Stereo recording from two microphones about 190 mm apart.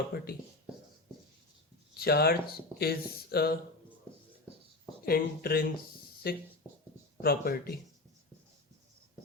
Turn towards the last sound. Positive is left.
turn(degrees=55)  # may be behind; listen again after turning